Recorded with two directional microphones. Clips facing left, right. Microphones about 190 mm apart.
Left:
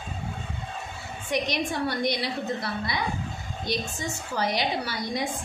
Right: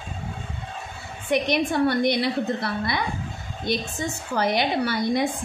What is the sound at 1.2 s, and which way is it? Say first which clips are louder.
Speech: right 5 dB; 55° right (ahead or behind).